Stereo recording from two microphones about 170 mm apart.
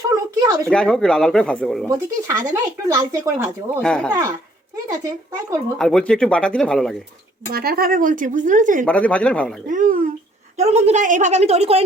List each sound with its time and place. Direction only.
0.1 s a sound: 20° right (ahead or behind)
0.7 s speech: 5° left (ahead or behind)
1.9 s speech: 20° right (ahead or behind)
3.8 s speech: 5° left (ahead or behind)
4.1 s speech: 15° right (ahead or behind)
5.7 s speech: 5° left (ahead or behind)
7.5 s speech: 60° right (ahead or behind)
8.9 s speech: 10° left (ahead or behind)
9.6 s speech: 50° right (ahead or behind)
10.6 s a woman's voice: 40° right (ahead or behind)